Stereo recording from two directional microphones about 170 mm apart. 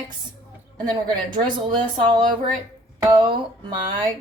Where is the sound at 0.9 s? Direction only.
25° right (ahead or behind).